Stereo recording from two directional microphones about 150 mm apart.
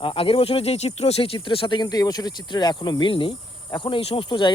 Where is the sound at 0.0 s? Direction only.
35° left (ahead or behind).